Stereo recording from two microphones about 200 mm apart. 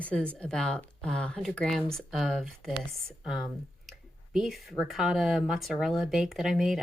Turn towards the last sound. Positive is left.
turn(degrees=0)  # may be behind; listen again after turning